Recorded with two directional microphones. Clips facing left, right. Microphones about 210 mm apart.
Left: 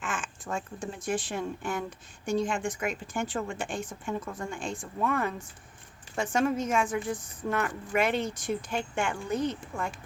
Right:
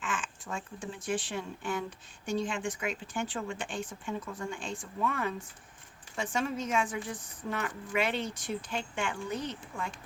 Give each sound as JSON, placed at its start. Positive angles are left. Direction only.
{"t": 0.0, "sound": "a woman's voice", "side_deg": 45}